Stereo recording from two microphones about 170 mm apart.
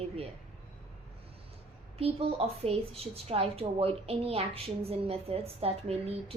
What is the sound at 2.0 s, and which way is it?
A woman's voice, 35° right (ahead or behind).